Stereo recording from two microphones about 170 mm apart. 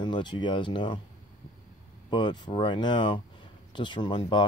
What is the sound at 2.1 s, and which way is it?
Speech, 25° left (ahead or behind).